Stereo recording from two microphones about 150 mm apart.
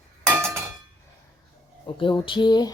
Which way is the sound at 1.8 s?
30° left (ahead or behind).